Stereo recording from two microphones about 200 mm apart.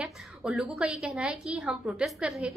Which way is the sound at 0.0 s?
5° right (ahead or behind).